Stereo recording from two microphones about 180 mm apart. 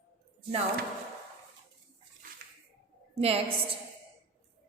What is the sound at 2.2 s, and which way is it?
Bathtub, 50° right (ahead or behind).